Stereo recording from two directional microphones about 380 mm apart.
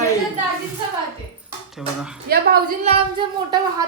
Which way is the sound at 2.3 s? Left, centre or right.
Right.